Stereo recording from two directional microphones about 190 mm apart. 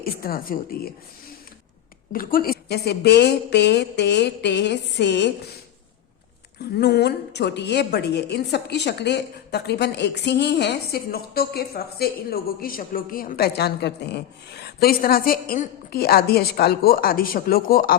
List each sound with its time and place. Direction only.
0.0 s speech: 50° left (ahead or behind)
2.1 s a woman's voice: 50° left (ahead or behind); by 5.3 s 65° left (ahead or behind)
6.7 s a woman's voice: 60° left (ahead or behind)